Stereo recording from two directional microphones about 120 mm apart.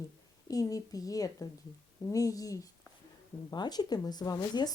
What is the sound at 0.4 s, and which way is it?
Speech, 30° left (ahead or behind).